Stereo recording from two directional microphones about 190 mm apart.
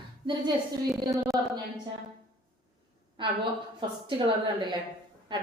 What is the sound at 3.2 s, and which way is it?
Speech, 25° right (ahead or behind).